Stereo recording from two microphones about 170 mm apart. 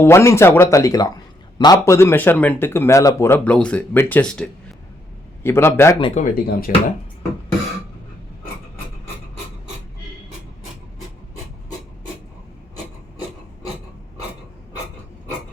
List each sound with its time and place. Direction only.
0.0 s a man's voice: 15° left (ahead or behind)
6.0 s speech: 35° left (ahead or behind)
6.7 s speech: 55° left (ahead or behind)